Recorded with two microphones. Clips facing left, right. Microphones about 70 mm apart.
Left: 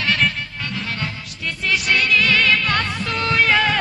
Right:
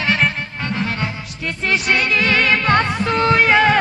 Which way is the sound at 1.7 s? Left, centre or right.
Right.